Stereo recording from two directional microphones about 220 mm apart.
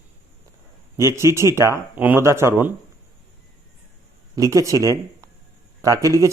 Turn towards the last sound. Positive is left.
turn(degrees=-15)  # may be behind; listen again after turning